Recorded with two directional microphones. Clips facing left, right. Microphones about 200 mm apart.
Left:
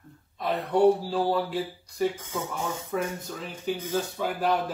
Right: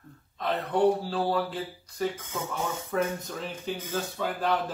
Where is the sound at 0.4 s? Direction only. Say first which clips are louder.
Left 2 dB; 15° left (ahead or behind).